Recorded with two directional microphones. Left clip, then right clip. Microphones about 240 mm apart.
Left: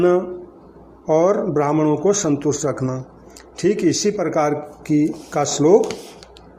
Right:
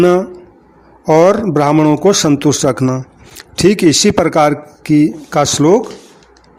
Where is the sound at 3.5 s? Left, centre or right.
Right.